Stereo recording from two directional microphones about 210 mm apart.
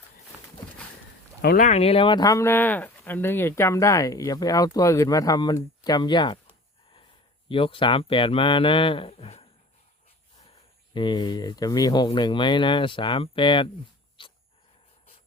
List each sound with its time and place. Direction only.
1.4 s speech: 50° left (ahead or behind)
1.6 s speech: 30° left (ahead or behind)
7.4 s speech: 25° left (ahead or behind)
10.9 s speech: 20° left (ahead or behind)
14.2 s dog: 25° left (ahead or behind)